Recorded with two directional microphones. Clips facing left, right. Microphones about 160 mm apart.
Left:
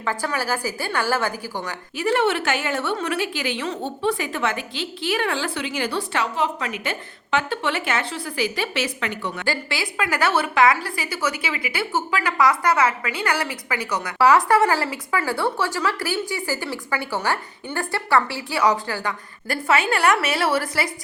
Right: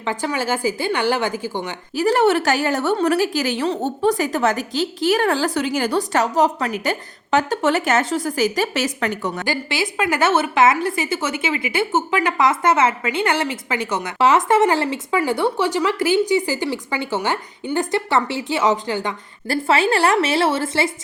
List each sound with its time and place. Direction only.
0.0 s a woman's voice: 20° right (ahead or behind)
2.0 s a woman's voice: 40° right (ahead or behind)
9.5 s a woman's voice: 20° right (ahead or behind)